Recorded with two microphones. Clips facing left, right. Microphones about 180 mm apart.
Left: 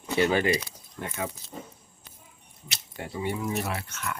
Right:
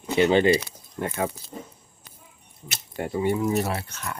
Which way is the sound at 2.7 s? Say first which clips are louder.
Right 8 dB; 50° right (ahead or behind).